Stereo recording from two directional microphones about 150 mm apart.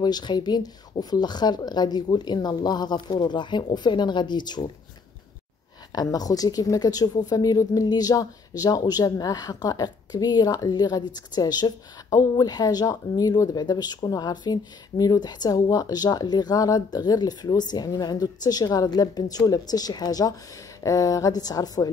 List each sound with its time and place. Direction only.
0.0 s speech: 30° left (ahead or behind)
5.9 s speech: 25° left (ahead or behind)